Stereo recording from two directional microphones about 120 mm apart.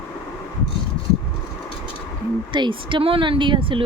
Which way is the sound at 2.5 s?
40° right (ahead or behind).